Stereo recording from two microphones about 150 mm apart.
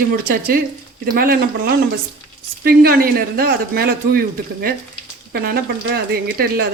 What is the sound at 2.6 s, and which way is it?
A man's voice, 90° right.